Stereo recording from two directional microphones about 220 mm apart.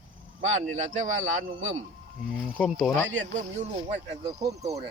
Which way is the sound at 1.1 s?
60° right (ahead or behind).